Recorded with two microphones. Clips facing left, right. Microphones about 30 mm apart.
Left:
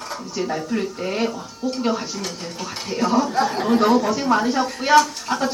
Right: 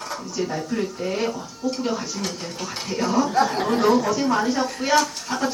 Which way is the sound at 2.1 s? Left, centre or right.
Centre.